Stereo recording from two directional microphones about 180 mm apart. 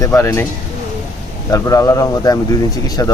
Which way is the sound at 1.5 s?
15° left (ahead or behind).